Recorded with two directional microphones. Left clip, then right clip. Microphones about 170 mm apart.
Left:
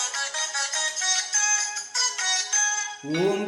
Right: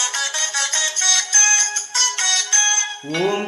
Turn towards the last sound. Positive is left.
turn(degrees=-25)  # may be behind; listen again after turning